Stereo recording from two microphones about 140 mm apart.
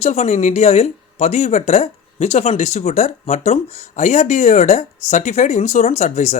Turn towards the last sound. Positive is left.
turn(degrees=55)  # may be behind; listen again after turning